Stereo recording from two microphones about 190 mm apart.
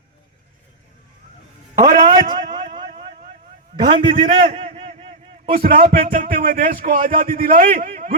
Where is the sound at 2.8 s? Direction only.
45° right (ahead or behind).